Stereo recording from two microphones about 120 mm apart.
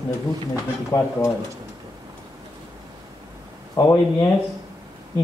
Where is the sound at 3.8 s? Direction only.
25° left (ahead or behind).